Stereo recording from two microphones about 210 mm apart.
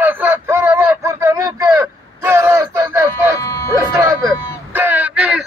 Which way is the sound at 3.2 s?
15° right (ahead or behind).